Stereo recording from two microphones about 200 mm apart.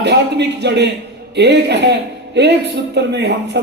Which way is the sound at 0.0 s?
60° right (ahead or behind).